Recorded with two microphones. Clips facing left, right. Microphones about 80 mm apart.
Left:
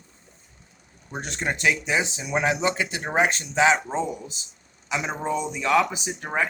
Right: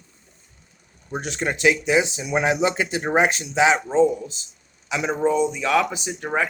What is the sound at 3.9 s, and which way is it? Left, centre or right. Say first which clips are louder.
A man's voice: right 9 dB; centre.